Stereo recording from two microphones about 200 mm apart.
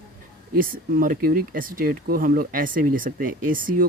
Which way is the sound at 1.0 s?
45° right (ahead or behind).